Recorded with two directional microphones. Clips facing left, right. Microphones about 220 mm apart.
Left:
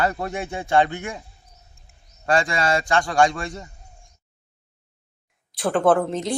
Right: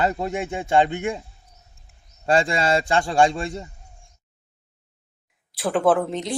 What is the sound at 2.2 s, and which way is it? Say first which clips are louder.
A man's voice: right 1 dB; 25° right (ahead or behind).